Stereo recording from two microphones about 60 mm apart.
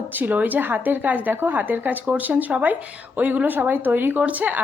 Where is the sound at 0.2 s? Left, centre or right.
Right.